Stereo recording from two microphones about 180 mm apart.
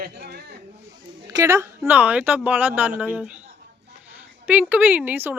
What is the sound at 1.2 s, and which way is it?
A woman's voice, 15° right (ahead or behind).